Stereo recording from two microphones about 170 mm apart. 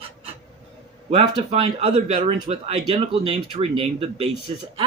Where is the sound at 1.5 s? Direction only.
40° right (ahead or behind).